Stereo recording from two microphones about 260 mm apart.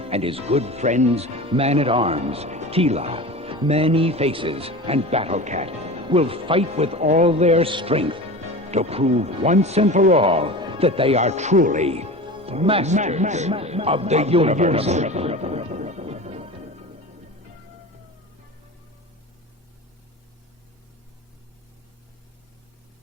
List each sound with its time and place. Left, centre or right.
0.0 s speech: right